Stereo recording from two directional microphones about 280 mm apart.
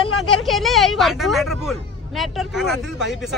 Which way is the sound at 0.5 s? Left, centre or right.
Centre.